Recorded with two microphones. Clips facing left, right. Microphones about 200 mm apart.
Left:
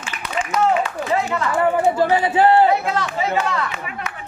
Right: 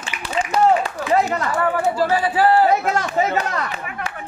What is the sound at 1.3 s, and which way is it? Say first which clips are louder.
Chatter: even; 40° right (ahead or behind).